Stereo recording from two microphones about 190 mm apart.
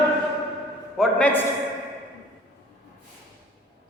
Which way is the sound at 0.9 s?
5° left (ahead or behind).